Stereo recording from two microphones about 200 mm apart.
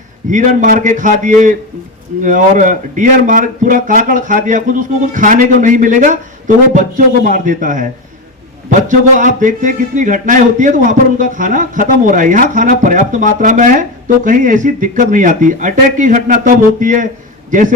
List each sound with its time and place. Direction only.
0.3 s a man's voice: 40° right (ahead or behind)
8.9 s a man's voice: 40° right (ahead or behind)